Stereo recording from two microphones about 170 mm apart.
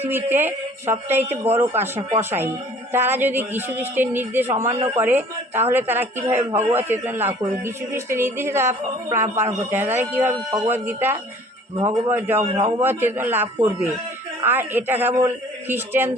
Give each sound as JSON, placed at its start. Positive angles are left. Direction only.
{"t": 0.0, "sound": "speech", "side_deg": -10}
{"t": 4.6, "sound": "a man's voice", "side_deg": -40}
{"t": 4.9, "sound": "speech", "side_deg": -10}
{"t": 12.4, "sound": "a man's voice", "side_deg": -35}
{"t": 12.8, "sound": "speech", "side_deg": -10}